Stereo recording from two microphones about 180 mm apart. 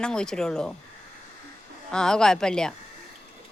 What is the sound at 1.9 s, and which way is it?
Speech, 5° left (ahead or behind).